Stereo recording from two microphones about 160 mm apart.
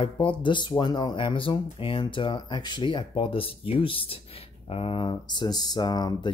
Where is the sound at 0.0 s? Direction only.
35° left (ahead or behind).